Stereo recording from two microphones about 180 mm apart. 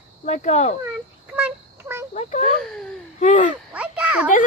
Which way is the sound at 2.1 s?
40° left (ahead or behind).